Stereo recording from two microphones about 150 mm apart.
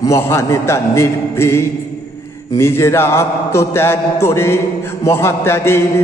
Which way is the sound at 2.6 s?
20° left (ahead or behind).